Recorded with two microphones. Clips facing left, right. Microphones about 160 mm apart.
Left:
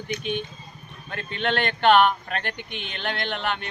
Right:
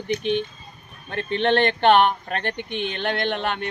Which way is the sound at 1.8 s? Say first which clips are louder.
Left 1 dB; 40° right (ahead or behind).